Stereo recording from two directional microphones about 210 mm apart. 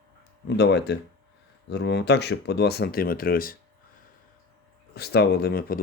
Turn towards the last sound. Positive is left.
turn(degrees=50)  # may be behind; listen again after turning